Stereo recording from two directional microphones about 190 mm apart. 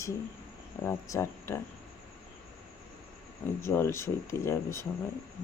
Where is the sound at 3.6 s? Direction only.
15° left (ahead or behind).